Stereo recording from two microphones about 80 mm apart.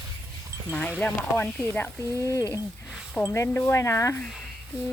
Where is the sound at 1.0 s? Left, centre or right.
Left.